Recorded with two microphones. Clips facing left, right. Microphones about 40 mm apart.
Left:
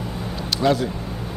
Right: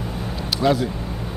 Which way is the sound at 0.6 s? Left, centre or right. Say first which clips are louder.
Even; centre.